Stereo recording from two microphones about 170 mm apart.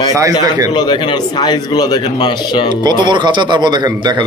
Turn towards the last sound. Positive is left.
turn(degrees=-25)  # may be behind; listen again after turning